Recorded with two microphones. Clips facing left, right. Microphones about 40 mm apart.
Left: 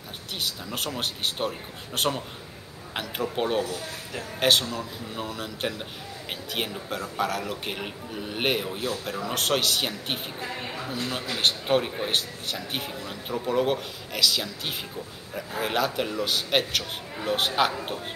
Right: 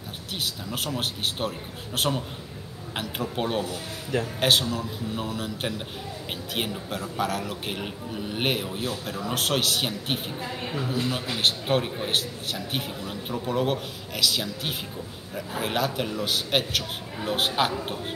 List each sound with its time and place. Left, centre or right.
0.4 s a man's voice: centre
3.6 s speech: right
4.4 s a man's voice: centre
11.3 s a man's voice: centre